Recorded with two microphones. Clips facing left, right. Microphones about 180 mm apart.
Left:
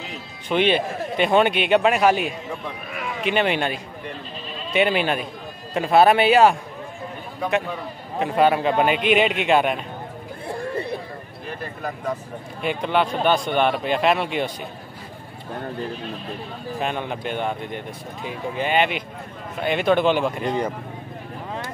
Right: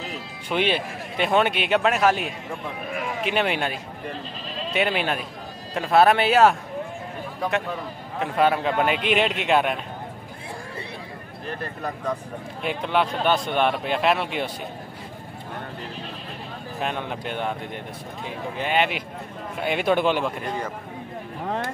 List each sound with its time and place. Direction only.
0.5 s speech: 5° right (ahead or behind)
8.2 s speech: centre (ahead or behind)
12.6 s speech: centre (ahead or behind)
16.8 s a man's voice: centre (ahead or behind)
20.4 s speech: 20° left (ahead or behind)
21.5 s vehicle: 55° right (ahead or behind)